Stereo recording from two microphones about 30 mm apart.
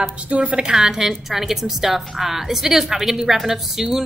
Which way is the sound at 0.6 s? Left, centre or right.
Centre.